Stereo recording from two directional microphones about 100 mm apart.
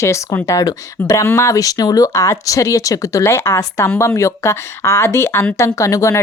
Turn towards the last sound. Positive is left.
turn(degrees=30)  # may be behind; listen again after turning